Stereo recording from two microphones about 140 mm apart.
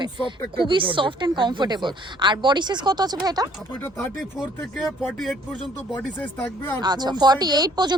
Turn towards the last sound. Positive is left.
turn(degrees=-30)  # may be behind; listen again after turning